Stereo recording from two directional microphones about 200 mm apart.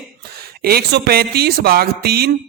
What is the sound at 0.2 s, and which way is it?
Speech, 50° right (ahead or behind).